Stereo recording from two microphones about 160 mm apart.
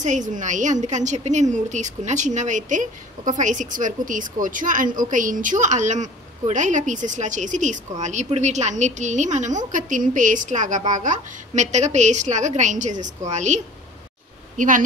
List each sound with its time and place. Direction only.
0.0 s a woman's voice: 50° right (ahead or behind)
14.6 s speech: 55° right (ahead or behind)